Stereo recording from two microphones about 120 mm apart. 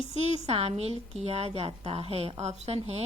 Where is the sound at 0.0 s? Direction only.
50° left (ahead or behind).